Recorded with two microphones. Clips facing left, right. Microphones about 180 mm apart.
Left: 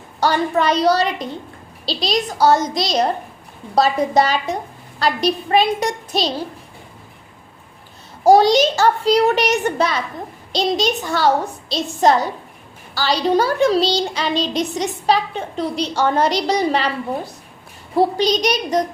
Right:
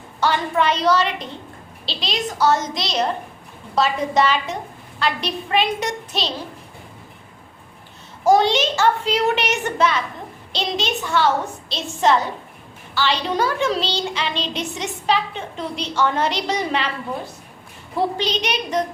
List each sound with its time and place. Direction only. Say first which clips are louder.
0.2 s a child's voice: left 2 dB; 40° left (ahead or behind)
8.2 s a child's voice: left 4 dB; 35° left (ahead or behind)
17.9 s a child's voice: left 6 dB; 40° left (ahead or behind)